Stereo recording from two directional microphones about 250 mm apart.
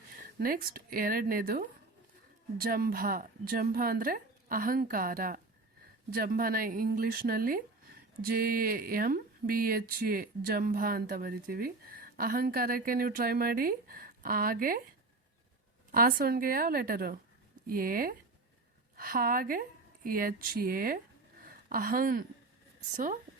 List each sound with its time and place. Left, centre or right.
0.3 s speech: right
15.9 s speech: right